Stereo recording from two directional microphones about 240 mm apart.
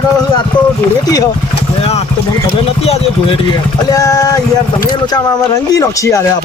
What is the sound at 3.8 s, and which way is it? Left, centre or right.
A man's voice, centre.